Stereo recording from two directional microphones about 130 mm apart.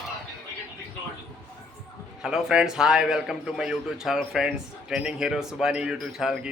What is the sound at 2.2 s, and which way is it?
A man's voice, 5° right (ahead or behind).